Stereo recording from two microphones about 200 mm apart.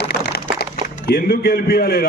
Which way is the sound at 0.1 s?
55° left (ahead or behind).